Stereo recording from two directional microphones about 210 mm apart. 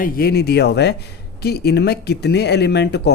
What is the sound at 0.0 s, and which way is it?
Speech, 50° left (ahead or behind).